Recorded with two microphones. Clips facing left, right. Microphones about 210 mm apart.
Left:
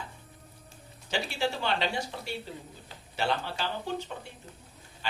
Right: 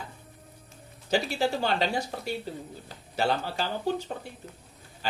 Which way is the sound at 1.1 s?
40° right (ahead or behind).